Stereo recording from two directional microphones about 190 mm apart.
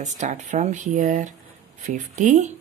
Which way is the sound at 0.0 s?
40° right (ahead or behind).